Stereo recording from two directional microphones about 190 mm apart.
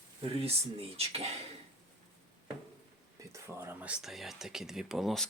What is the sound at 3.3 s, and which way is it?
Speech, 10° right (ahead or behind).